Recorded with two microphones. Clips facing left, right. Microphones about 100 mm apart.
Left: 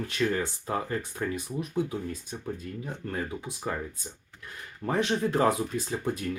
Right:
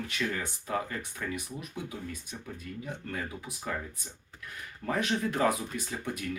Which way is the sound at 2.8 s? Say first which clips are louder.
Left 4 dB; 30° left (ahead or behind).